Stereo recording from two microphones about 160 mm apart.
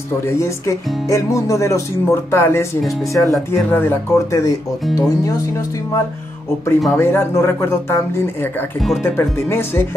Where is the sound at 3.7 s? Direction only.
15° left (ahead or behind).